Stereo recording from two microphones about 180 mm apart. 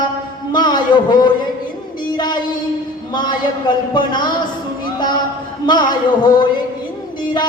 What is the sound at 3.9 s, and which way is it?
Child singing, 25° left (ahead or behind).